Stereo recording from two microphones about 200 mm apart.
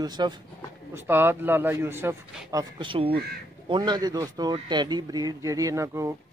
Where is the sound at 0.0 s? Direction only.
20° right (ahead or behind).